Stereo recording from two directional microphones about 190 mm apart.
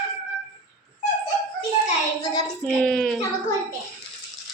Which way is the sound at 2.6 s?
5° left (ahead or behind).